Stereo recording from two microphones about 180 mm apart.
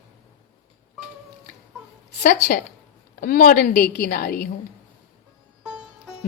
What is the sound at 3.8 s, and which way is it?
Speech, 65° left (ahead or behind).